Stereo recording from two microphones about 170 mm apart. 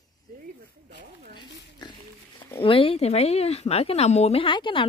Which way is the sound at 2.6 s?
30° left (ahead or behind).